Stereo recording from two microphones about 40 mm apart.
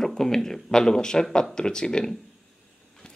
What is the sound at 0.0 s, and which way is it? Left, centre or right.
Speech, centre.